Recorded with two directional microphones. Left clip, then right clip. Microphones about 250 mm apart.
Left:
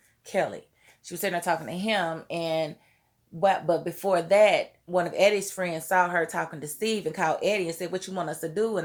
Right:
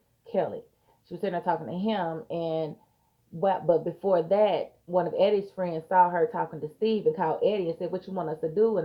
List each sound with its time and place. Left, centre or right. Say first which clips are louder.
1.2 s speech: left 1 dB; left